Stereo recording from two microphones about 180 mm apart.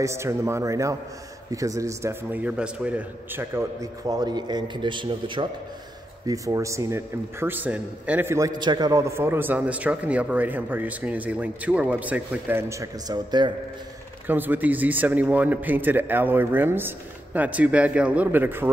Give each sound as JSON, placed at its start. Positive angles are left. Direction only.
{"t": 0.0, "sound": "a man's voice", "side_deg": -15}
{"t": 14.2, "sound": "a man's voice", "side_deg": -10}